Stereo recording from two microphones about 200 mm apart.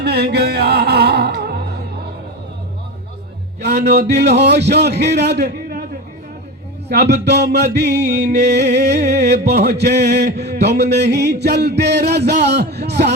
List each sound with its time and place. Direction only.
0.0 s music: 55° right (ahead or behind)
3.6 s a sound: 55° right (ahead or behind)
4.4 s a man's voice: 55° right (ahead or behind)
6.8 s music: 55° right (ahead or behind)